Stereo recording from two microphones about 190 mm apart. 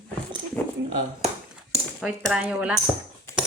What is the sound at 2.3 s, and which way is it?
Speech, 5° right (ahead or behind).